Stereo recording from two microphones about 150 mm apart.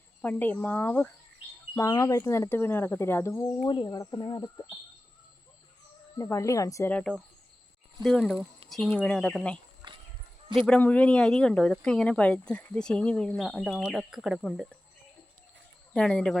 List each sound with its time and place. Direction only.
0.2 s speech: 10° left (ahead or behind)
3.7 s speech: 35° left (ahead or behind)
3.9 s speech: 20° left (ahead or behind)
6.1 s speech: 20° left (ahead or behind)
6.9 s speech: 5° left (ahead or behind)
9.8 s a sound: 30° right (ahead or behind)
10.7 s speech: 10° left (ahead or behind)
15.9 s speech: 5° left (ahead or behind)